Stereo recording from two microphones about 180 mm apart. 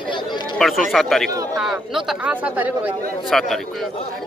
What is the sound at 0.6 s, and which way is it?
A man's voice, centre (ahead or behind).